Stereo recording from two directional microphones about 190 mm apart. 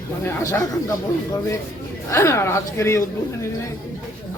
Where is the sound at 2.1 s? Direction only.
15° left (ahead or behind).